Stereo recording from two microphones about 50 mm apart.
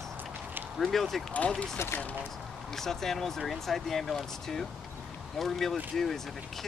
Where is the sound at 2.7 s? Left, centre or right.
Centre.